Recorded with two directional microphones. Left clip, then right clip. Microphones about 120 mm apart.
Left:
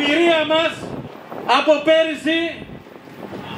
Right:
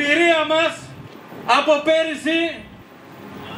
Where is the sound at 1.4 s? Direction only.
25° right (ahead or behind).